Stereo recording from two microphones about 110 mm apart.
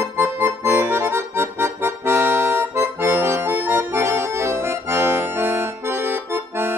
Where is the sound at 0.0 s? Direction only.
25° right (ahead or behind).